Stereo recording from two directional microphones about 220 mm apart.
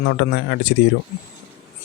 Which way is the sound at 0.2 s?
55° left (ahead or behind).